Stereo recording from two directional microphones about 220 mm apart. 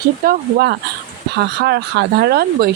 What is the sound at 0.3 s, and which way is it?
A woman's voice, 45° right (ahead or behind).